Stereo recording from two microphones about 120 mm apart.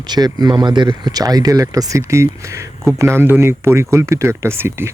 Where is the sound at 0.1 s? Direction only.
35° right (ahead or behind).